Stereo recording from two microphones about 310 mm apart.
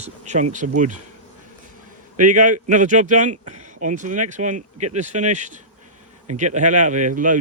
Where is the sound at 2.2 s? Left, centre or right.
Right.